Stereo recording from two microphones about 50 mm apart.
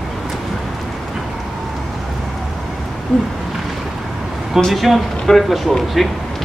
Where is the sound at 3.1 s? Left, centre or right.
Centre.